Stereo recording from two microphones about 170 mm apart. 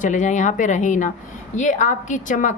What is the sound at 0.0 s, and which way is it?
Speech, 45° left (ahead or behind).